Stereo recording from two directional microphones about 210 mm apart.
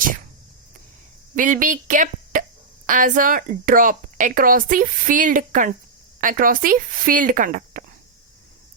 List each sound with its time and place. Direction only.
1.4 s a woman's voice: 40° right (ahead or behind)